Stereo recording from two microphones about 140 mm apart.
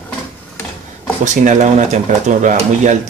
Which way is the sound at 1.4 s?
60° right (ahead or behind).